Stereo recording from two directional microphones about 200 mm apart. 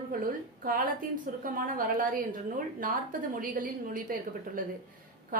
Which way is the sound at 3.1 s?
45° right (ahead or behind).